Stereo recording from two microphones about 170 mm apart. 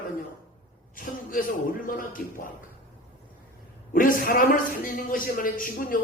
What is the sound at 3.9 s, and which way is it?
A man's voice, 55° left (ahead or behind).